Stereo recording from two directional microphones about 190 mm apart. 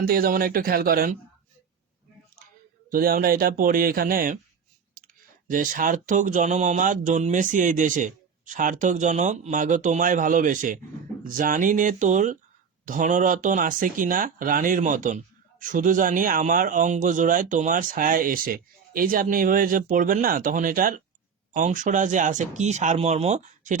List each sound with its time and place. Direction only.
0.0 s speech: 50° right (ahead or behind)
2.9 s speech: 50° right (ahead or behind)
5.0 s clicking: 50° right (ahead or behind)
5.5 s speech: 45° right (ahead or behind)